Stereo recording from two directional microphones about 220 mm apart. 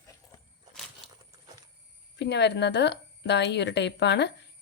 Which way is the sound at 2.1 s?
50° left (ahead or behind).